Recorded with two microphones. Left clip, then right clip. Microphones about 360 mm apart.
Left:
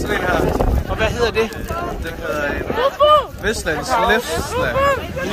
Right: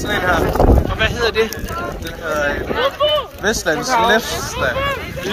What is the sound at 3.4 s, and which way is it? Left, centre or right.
Speech, centre.